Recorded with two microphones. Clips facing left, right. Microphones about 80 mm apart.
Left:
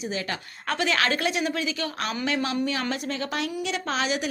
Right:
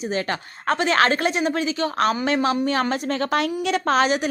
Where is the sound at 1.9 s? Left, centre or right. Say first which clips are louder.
Right 9 dB; right.